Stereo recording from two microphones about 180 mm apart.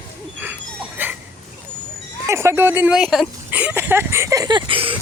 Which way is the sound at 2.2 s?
15° right (ahead or behind).